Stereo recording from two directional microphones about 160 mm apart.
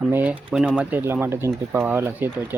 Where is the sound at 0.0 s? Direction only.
10° right (ahead or behind).